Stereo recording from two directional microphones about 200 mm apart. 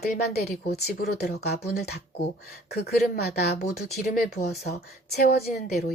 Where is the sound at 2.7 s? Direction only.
50° left (ahead or behind).